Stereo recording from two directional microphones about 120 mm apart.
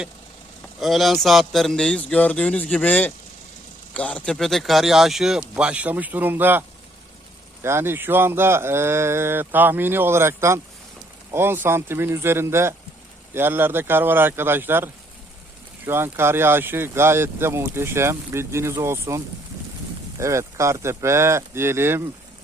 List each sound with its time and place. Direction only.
0.8 s a man's voice: centre (ahead or behind); by 14.8 s 20° right (ahead or behind)
15.9 s speech: 20° right (ahead or behind)